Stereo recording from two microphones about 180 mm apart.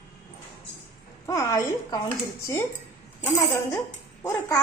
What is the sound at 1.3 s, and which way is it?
Speech, 20° left (ahead or behind).